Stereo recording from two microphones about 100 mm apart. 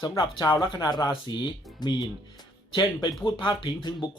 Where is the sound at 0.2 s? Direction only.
45° left (ahead or behind).